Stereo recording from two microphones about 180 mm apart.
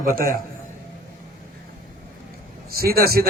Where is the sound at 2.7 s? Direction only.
55° right (ahead or behind).